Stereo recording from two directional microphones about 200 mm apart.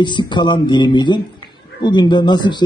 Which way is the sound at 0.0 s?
25° left (ahead or behind).